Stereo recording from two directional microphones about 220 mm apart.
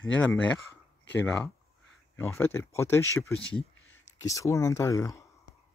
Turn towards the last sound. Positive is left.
turn(degrees=15)  # may be behind; listen again after turning